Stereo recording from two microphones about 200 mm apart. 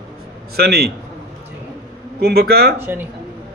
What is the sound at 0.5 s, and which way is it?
Speech, 50° right (ahead or behind).